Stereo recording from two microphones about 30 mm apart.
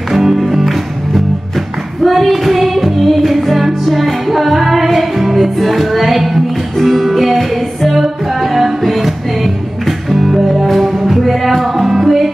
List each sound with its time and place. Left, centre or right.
0.1 s music: centre
10.1 s music: centre
10.4 s music: centre